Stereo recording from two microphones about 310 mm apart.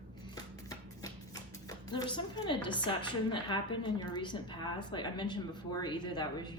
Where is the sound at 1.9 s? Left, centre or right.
Centre.